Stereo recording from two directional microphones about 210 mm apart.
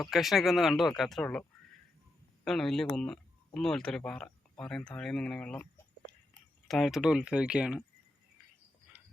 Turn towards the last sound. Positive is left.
turn(degrees=-5)  # may be behind; listen again after turning